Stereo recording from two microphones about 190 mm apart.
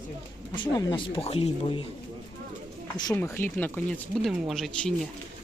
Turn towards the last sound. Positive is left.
turn(degrees=0)  # may be behind; listen again after turning